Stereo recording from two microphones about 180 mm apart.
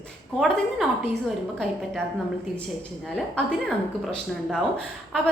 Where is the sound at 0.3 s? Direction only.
Centre (ahead or behind).